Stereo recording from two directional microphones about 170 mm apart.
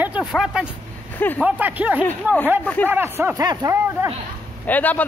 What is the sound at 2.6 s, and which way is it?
Speech, 10° left (ahead or behind).